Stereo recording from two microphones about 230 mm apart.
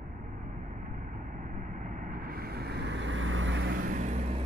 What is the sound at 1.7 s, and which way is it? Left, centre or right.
Vehicle, right.